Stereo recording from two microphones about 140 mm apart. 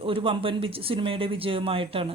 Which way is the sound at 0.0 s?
40° right (ahead or behind).